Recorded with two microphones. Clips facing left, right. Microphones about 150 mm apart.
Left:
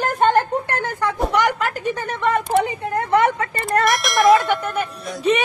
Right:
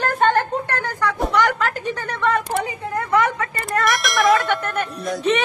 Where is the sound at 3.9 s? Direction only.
Centre (ahead or behind).